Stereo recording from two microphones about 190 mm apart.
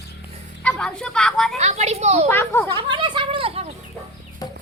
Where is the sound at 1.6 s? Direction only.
35° right (ahead or behind).